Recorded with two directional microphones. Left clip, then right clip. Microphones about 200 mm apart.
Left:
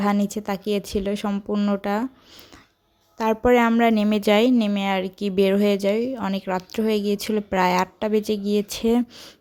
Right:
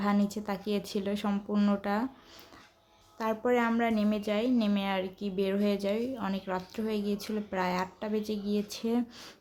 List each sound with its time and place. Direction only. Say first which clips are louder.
0.0 s speech: left 7 dB; 35° left (ahead or behind)
3.2 s speech: left 10 dB; 40° left (ahead or behind)